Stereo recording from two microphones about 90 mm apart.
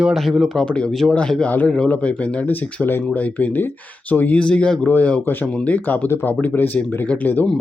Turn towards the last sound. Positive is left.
turn(degrees=20)  # may be behind; listen again after turning